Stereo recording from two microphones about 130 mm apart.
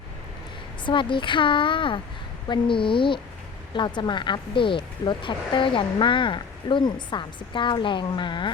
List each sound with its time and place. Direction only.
0.9 s speech: 40° left (ahead or behind)